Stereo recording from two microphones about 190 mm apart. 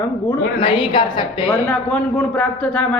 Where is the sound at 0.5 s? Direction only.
25° left (ahead or behind).